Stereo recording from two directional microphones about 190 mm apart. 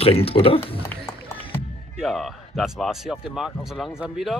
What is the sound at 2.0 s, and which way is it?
Speech, centre (ahead or behind).